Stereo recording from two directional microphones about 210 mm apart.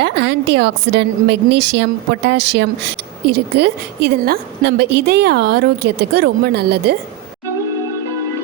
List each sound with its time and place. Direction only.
0.0 s a woman's voice: 55° right (ahead or behind)